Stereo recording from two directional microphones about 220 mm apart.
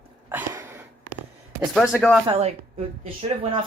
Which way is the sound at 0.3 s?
10° right (ahead or behind).